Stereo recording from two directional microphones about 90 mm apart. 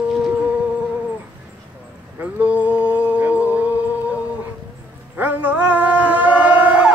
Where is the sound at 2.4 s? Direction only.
15° right (ahead or behind).